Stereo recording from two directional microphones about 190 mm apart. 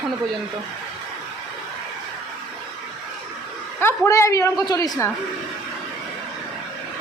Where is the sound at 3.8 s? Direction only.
15° left (ahead or behind).